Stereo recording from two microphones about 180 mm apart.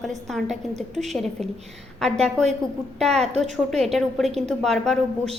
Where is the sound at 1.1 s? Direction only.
5° left (ahead or behind).